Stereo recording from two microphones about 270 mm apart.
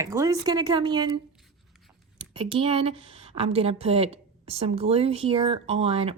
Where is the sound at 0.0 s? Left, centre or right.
Centre.